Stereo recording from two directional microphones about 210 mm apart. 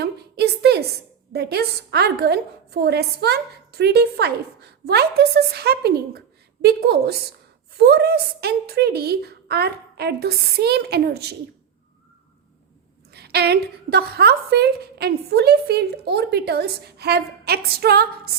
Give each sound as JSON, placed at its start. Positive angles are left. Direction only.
{"t": 0.0, "sound": "a sound", "side_deg": -50}
{"t": 1.3, "sound": "a woman's voice", "side_deg": -50}
{"t": 13.1, "sound": "a woman's voice", "side_deg": -50}